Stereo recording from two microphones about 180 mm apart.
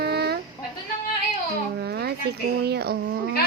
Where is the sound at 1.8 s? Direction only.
65° right (ahead or behind).